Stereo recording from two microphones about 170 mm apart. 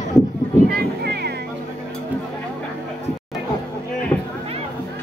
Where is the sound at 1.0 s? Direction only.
70° right (ahead or behind).